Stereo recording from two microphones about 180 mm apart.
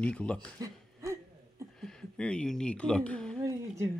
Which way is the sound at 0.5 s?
20° right (ahead or behind).